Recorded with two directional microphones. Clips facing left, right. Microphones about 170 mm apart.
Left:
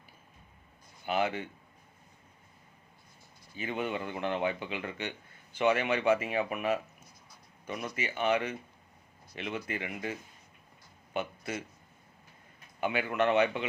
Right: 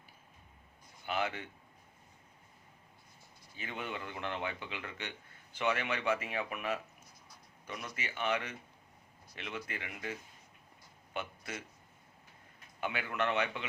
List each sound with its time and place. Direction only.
1.0 s speech: 15° left (ahead or behind)
3.5 s speech: 15° left (ahead or behind)
11.1 s a sound: 15° left (ahead or behind)
12.8 s speech: 15° left (ahead or behind)